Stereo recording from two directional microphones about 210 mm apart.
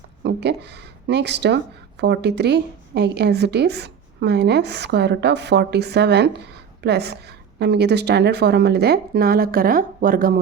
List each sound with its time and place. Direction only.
0.2 s speech: 55° right (ahead or behind)